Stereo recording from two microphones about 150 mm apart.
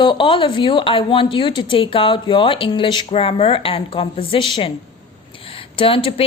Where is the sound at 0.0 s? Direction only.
35° left (ahead or behind).